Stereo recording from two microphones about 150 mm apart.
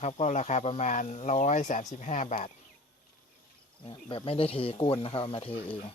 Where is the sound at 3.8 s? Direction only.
35° left (ahead or behind).